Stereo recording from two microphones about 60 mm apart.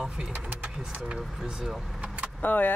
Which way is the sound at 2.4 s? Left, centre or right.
Left.